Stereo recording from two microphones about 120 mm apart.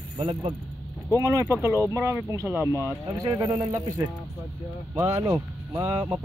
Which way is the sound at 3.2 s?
35° right (ahead or behind).